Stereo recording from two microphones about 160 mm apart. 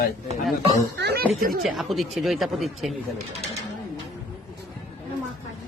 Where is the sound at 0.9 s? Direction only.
85° right; by 1.6 s 70° right (ahead or behind).